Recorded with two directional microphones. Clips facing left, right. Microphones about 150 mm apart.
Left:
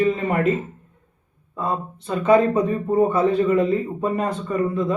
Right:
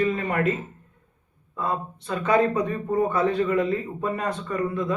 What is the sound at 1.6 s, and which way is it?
Speech, 25° left (ahead or behind).